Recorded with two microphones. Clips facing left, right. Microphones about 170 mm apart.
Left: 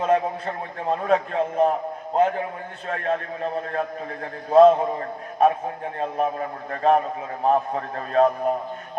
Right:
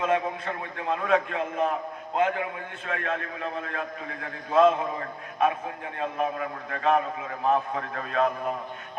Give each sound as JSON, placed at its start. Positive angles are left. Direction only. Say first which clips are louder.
{"t": 0.0, "sound": "a man's voice", "louder": "left 4 dB", "side_deg": 35}